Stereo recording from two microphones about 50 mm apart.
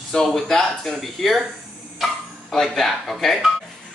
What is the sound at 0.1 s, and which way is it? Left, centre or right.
Speech, centre.